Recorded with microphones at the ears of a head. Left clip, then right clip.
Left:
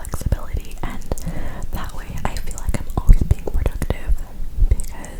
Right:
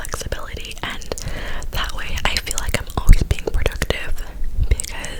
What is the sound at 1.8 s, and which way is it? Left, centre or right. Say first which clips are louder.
Whispering: right 6 dB; right.